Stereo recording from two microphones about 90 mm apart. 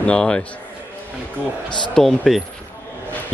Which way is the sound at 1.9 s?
Centre (ahead or behind).